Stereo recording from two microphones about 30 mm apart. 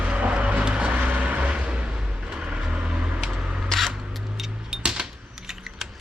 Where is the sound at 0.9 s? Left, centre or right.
Right.